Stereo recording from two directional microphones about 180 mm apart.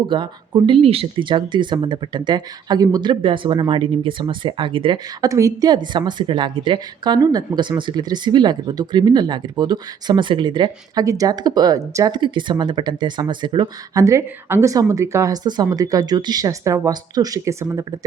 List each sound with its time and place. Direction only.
0.1 s speech: 25° right (ahead or behind)